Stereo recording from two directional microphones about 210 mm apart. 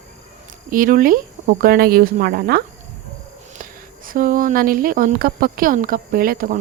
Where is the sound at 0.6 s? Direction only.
40° right (ahead or behind).